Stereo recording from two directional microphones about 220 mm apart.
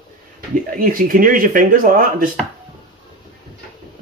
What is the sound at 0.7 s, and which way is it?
Speech, 40° right (ahead or behind).